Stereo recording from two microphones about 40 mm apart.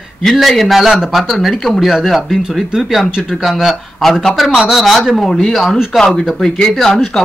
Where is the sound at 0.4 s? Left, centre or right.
Centre.